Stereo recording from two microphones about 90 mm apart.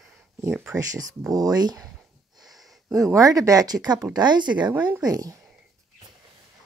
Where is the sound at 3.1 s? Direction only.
40° right (ahead or behind); by 4.7 s 55° right (ahead or behind).